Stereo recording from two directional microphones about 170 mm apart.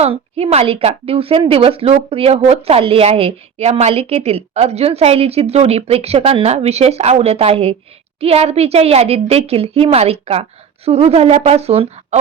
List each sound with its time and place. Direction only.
0.0 s a woman's voice: 35° right (ahead or behind)